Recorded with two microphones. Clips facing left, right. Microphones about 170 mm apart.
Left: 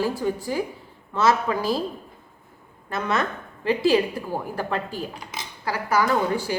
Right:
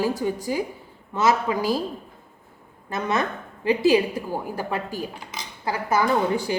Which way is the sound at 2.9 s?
20° right (ahead or behind).